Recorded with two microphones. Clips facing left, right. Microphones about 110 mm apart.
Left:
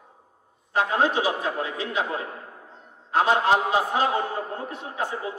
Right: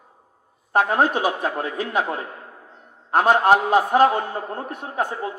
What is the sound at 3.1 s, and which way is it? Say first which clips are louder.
Speech: right 4 dB; 50° right (ahead or behind).